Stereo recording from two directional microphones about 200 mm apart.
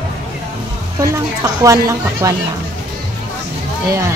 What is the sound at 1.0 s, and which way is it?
Speech, 15° right (ahead or behind).